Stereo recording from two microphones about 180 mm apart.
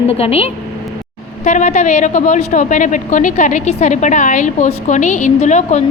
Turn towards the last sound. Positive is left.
turn(degrees=40)  # may be behind; listen again after turning